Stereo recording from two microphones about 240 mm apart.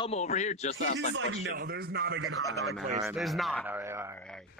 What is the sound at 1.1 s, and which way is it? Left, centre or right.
Speech, right.